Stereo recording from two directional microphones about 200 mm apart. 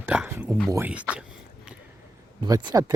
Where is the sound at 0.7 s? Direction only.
10° right (ahead or behind).